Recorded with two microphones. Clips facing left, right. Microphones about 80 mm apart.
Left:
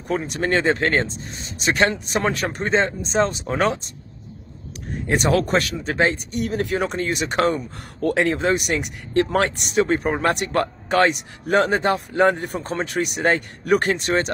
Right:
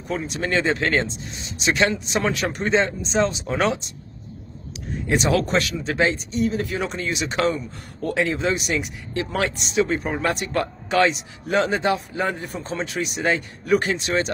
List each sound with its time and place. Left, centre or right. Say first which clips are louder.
0.1 s speech: left 2 dB; left
5.1 s speech: left 1 dB; left
12.2 s speech: left 7 dB; left